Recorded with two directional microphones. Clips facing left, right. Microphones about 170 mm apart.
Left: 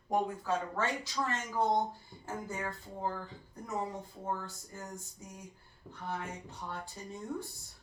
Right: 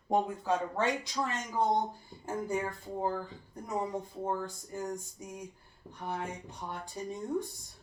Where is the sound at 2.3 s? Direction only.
15° right (ahead or behind).